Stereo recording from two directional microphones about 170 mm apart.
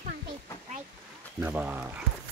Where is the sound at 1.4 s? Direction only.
10° right (ahead or behind).